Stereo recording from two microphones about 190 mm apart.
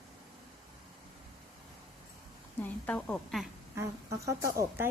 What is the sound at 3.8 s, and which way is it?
Speech, 15° right (ahead or behind).